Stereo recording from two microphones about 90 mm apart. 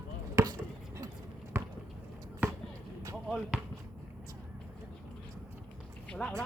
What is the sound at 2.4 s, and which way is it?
Basketball bounce, 20° right (ahead or behind).